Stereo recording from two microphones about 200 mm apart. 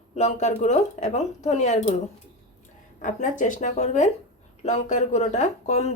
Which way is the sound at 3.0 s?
40° left (ahead or behind).